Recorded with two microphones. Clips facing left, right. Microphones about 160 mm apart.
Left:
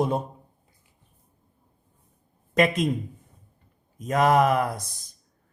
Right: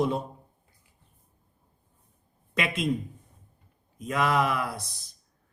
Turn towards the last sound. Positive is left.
turn(degrees=45)  # may be behind; listen again after turning